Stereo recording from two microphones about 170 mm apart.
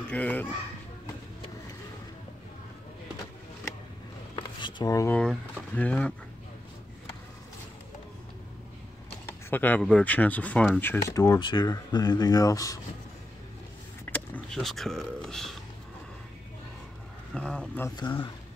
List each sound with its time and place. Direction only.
0.1 s speech: 10° left (ahead or behind)
4.4 s a sound: 25° left (ahead or behind)
5.1 s speech: 5° left (ahead or behind)
9.2 s speech: 10° left (ahead or behind)
14.1 s speech: 5° left (ahead or behind)
17.3 s speech: 5° left (ahead or behind)
17.8 s speech: 25° left (ahead or behind)